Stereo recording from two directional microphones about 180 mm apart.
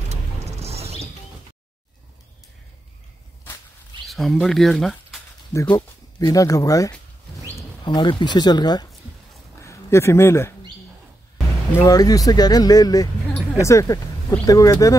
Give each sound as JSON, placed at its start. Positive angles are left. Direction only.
{"t": 0.1, "sound": "music", "side_deg": -35}
{"t": 4.1, "sound": "speech", "side_deg": 0}
{"t": 5.5, "sound": "speech", "side_deg": 15}
{"t": 9.6, "sound": "a sound", "side_deg": 15}
{"t": 11.7, "sound": "speech", "side_deg": 20}